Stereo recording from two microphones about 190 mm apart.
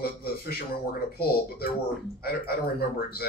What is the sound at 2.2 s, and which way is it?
Speech, 55° left (ahead or behind).